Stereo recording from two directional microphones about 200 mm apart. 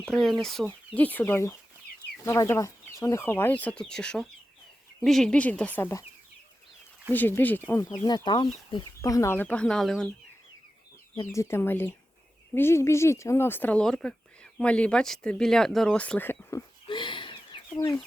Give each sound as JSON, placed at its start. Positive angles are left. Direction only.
{"t": 0.0, "sound": "speech", "side_deg": 0}
{"t": 7.1, "sound": "speech", "side_deg": 10}
{"t": 11.3, "sound": "speech", "side_deg": 10}
{"t": 16.8, "sound": "a sound", "side_deg": 25}
{"t": 17.7, "sound": "speech", "side_deg": 10}